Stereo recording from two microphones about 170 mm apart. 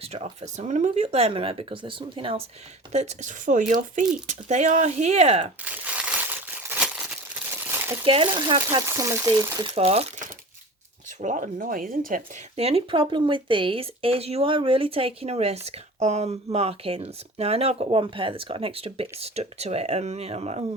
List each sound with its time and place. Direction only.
0.0 s speech: 40° right (ahead or behind)
5.6 s crumpling: 10° right (ahead or behind)
8.0 s speech: 30° right (ahead or behind)
8.9 s speech: 15° right (ahead or behind)
9.6 s speech: 35° right (ahead or behind)
11.2 s speech: 50° right (ahead or behind)
12.5 s speech: 35° right (ahead or behind)